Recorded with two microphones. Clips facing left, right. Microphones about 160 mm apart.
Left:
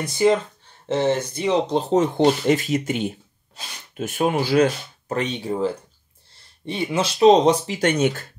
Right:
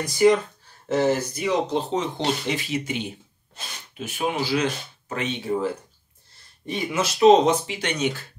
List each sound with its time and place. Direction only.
0.0 s speech: 25° left (ahead or behind)
2.0 s speech: 50° left (ahead or behind)